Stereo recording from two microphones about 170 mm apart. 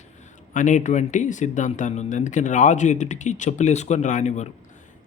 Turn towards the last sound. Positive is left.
turn(degrees=45)  # may be behind; listen again after turning